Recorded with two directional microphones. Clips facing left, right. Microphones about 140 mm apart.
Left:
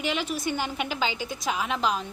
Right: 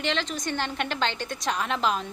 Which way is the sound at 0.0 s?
10° left (ahead or behind).